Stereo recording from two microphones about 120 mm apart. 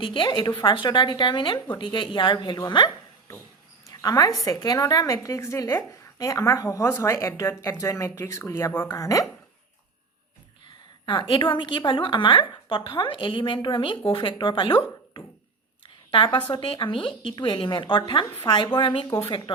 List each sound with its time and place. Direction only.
0.0 s a woman's voice: 45° left (ahead or behind)
3.9 s a woman's voice: 30° left (ahead or behind)
11.0 s a woman's voice: 45° left (ahead or behind)